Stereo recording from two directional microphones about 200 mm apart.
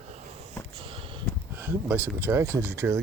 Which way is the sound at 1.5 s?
10° right (ahead or behind).